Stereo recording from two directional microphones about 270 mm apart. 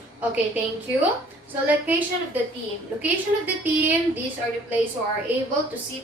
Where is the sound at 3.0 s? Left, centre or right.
Centre.